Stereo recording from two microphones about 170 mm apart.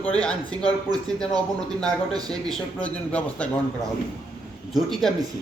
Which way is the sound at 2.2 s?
25° right (ahead or behind).